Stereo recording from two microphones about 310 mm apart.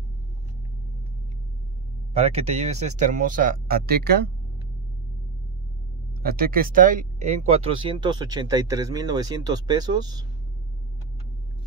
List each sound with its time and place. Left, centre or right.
2.1 s speech: right
6.2 s speech: right; by 10.2 s centre